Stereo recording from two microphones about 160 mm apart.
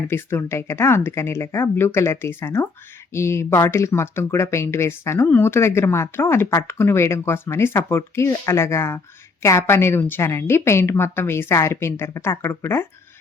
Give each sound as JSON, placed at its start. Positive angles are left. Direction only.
{"t": 0.1, "sound": "speech", "side_deg": 15}